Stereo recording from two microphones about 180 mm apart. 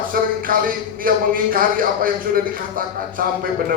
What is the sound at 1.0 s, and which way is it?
Speech, 50° right (ahead or behind).